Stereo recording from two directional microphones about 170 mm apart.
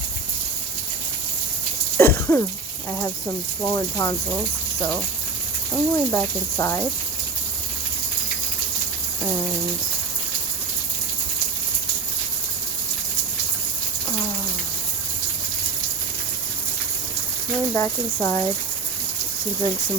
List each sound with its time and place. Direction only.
2.0 s cough: 15° left (ahead or behind)
3.7 s speech: 15° left (ahead or behind)
5.7 s speech: 10° left (ahead or behind)
17.7 s speech: 15° left (ahead or behind)